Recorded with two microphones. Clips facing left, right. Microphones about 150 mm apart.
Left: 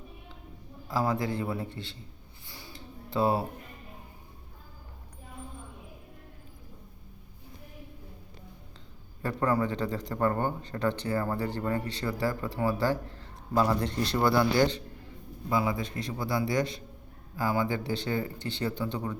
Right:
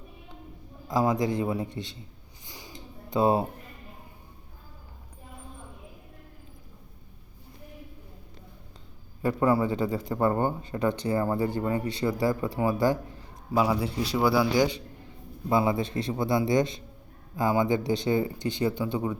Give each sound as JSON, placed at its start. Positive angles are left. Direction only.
{"t": 0.9, "sound": "a man's voice", "side_deg": -15}
{"t": 2.5, "sound": "a sound", "side_deg": -20}
{"t": 9.2, "sound": "a man's voice", "side_deg": -10}
{"t": 15.4, "sound": "a man's voice", "side_deg": -25}